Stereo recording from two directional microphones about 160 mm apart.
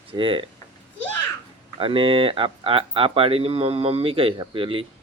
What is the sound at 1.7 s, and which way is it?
Speech, 35° right (ahead or behind).